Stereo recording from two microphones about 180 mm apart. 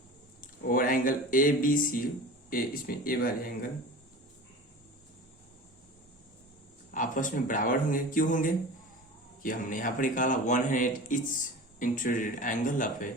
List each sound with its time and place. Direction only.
0.4 s speech: 50° left (ahead or behind)
6.9 s speech: 45° left (ahead or behind)